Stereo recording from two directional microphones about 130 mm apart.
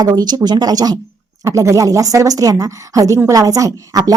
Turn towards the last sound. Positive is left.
turn(degrees=-30)  # may be behind; listen again after turning